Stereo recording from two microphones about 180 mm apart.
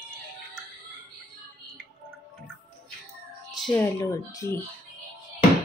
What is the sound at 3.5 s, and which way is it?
Music, centre (ahead or behind).